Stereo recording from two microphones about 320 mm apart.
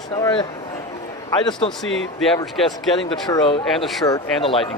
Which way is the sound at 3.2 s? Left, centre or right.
Centre.